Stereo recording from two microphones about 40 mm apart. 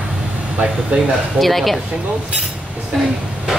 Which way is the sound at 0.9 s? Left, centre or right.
Right.